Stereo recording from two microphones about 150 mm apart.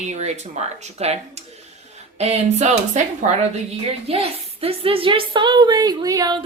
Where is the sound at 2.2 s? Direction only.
45° right (ahead or behind).